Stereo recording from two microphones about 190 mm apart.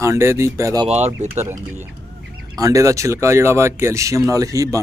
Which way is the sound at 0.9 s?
35° right (ahead or behind).